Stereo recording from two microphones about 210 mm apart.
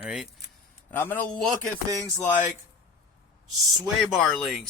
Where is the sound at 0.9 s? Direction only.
10° left (ahead or behind).